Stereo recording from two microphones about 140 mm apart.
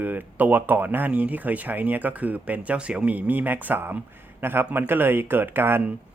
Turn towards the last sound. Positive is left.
turn(degrees=-15)  # may be behind; listen again after turning